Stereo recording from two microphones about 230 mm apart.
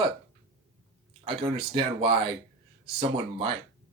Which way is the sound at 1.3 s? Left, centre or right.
Right.